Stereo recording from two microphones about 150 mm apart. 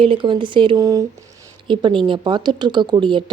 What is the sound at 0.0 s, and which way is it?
Speech, 35° right (ahead or behind).